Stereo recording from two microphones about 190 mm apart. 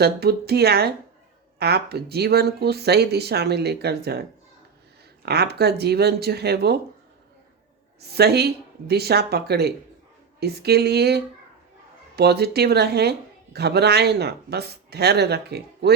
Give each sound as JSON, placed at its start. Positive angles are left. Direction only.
{"t": 0.0, "sound": "speech", "side_deg": -55}
{"t": 5.2, "sound": "speech", "side_deg": -60}
{"t": 8.0, "sound": "speech", "side_deg": -55}